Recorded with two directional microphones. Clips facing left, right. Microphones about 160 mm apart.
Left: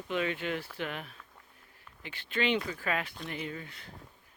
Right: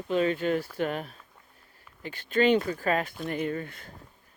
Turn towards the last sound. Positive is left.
turn(degrees=-50)  # may be behind; listen again after turning